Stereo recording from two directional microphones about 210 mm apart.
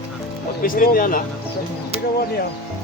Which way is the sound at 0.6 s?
45° left (ahead or behind).